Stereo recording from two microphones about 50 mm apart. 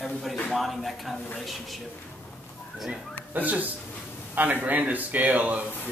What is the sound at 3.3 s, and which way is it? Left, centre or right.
A man's voice, right.